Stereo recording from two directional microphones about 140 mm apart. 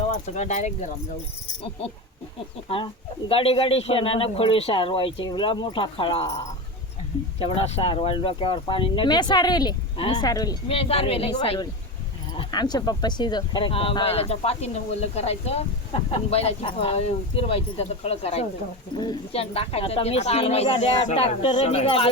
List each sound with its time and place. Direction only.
0.1 s speech: 55° left (ahead or behind)
2.6 s speech: 40° left (ahead or behind)
7.3 s speech: 45° left (ahead or behind); by 10.6 s 25° left (ahead or behind)
10.7 s speech: 45° left (ahead or behind)